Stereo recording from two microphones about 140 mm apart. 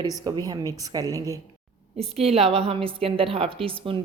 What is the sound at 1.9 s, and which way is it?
A woman's voice, 45° right (ahead or behind).